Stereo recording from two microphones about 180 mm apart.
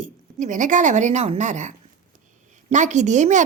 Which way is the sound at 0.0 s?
45° right (ahead or behind).